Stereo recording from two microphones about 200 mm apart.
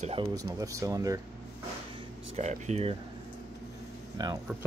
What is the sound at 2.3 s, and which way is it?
Speech, 35° right (ahead or behind).